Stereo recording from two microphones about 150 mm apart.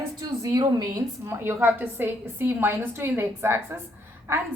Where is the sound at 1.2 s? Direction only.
15° right (ahead or behind).